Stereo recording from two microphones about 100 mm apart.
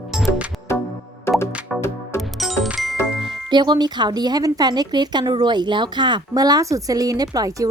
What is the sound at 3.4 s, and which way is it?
Speech, 50° right (ahead or behind).